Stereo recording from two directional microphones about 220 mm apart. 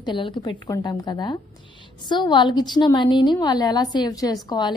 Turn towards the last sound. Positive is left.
turn(degrees=20)  # may be behind; listen again after turning